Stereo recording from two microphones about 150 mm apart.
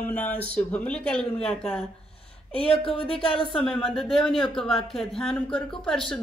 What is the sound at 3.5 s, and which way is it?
Speech, centre (ahead or behind).